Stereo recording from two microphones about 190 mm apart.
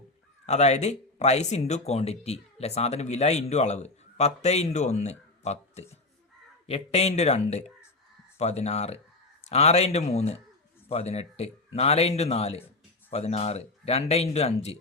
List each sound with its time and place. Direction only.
0.4 s speech: 35° left (ahead or behind)